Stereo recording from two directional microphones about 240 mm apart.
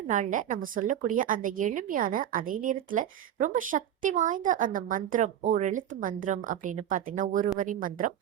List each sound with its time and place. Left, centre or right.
0.1 s a woman's voice: right